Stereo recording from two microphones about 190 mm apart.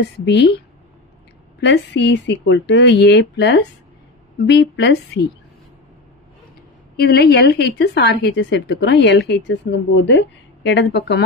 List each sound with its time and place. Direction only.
0.0 s a woman's voice: 65° left (ahead or behind)
1.6 s a woman's voice: 65° left (ahead or behind)
7.0 s a woman's voice: 55° left (ahead or behind)